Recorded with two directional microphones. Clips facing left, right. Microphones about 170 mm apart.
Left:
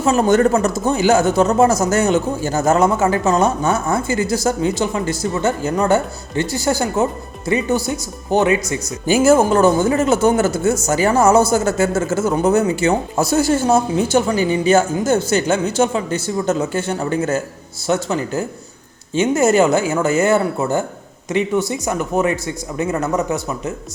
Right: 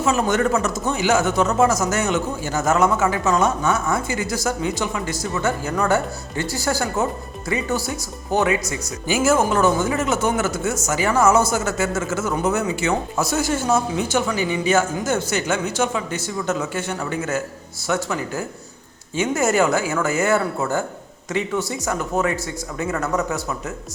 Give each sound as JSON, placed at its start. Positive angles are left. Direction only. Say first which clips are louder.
{"t": 0.0, "sound": "speech", "louder": "left 5 dB", "side_deg": 35}
{"t": 9.0, "sound": "speech", "louder": "left 6 dB", "side_deg": 35}